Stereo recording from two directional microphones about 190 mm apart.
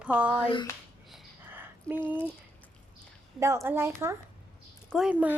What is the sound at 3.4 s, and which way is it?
A woman's voice, 15° right (ahead or behind).